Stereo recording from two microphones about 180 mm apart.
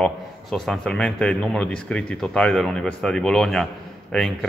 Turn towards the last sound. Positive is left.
turn(degrees=5)  # may be behind; listen again after turning